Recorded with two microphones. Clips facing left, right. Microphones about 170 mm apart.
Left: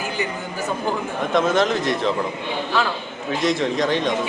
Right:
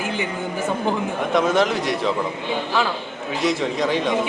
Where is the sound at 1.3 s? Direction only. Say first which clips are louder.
Even; 10° right (ahead or behind).